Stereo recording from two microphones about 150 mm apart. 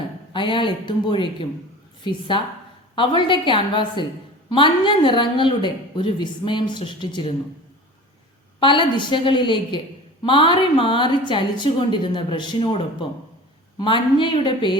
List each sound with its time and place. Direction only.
0.3 s a woman's voice: 35° left (ahead or behind)
8.6 s a woman's voice: 35° left (ahead or behind)